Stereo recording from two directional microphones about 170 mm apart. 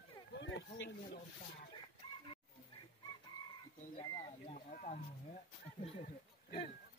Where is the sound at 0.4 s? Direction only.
90° left.